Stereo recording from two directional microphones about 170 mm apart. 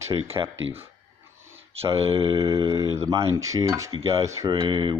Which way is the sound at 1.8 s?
20° right (ahead or behind).